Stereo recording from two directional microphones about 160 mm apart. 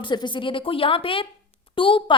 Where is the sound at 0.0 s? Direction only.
30° left (ahead or behind).